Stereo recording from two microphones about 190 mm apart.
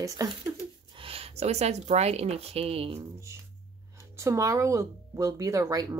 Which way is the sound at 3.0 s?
15° right (ahead or behind).